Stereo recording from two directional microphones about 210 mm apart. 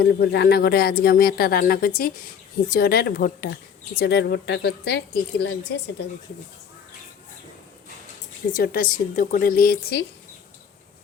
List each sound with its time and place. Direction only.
0.0 s a woman's voice: 50° left (ahead or behind)
8.5 s speech: 45° left (ahead or behind)